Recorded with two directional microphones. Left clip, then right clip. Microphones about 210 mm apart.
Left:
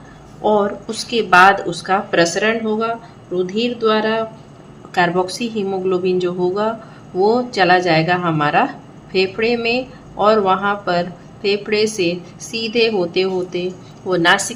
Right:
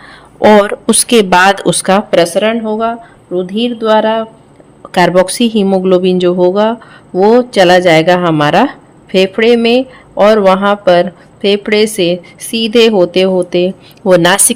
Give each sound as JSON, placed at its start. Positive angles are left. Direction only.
{"t": 0.4, "sound": "a woman's voice", "side_deg": -55}
{"t": 4.9, "sound": "a woman's voice", "side_deg": -55}